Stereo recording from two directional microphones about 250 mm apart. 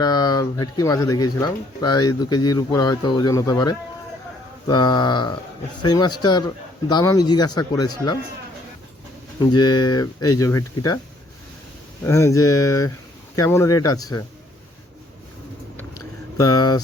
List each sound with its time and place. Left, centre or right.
0.0 s speech: centre
9.4 s speech: centre
12.0 s speech: centre
16.4 s speech: centre